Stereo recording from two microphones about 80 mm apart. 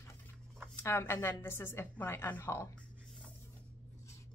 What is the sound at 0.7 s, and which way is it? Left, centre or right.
Speech, left.